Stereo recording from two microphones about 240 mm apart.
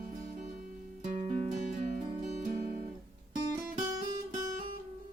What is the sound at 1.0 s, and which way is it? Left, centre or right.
Music, right.